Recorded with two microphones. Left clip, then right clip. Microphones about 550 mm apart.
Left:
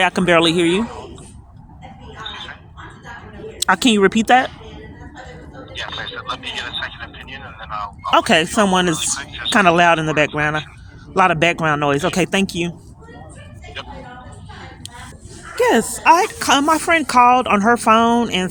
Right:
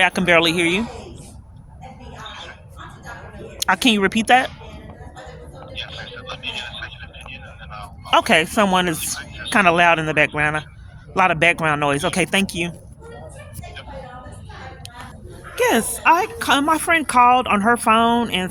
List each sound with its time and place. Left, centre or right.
0.0 s a woman's voice: right
3.6 s a woman's voice: right
5.7 s a sound: right
11.1 s a woman's voice: right
15.5 s a woman's voice: right